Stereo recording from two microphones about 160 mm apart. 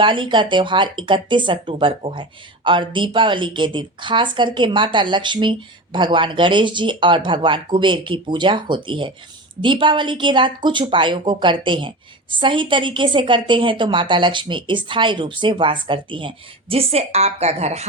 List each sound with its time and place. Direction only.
0.0 s a woman's voice: 30° right (ahead or behind)